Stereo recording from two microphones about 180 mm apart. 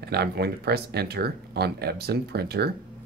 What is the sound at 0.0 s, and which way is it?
Speech, 65° right (ahead or behind).